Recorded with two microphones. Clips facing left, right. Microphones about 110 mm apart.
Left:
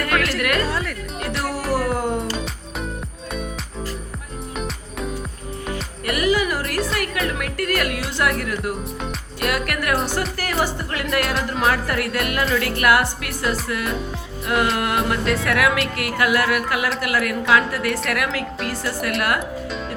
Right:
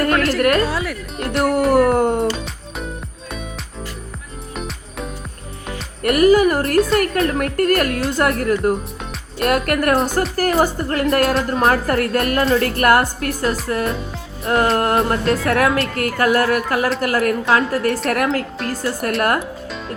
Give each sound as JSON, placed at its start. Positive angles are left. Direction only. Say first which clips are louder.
{"t": 0.0, "sound": "music", "louder": "right 5 dB", "side_deg": -35}
{"t": 0.6, "sound": "music", "louder": "right 3 dB", "side_deg": -5}
{"t": 1.7, "sound": "music", "louder": "right 6 dB", "side_deg": -55}
{"t": 4.5, "sound": "music", "louder": "right 1 dB", "side_deg": 0}
{"t": 6.1, "sound": "speech", "louder": "right 8 dB", "side_deg": -45}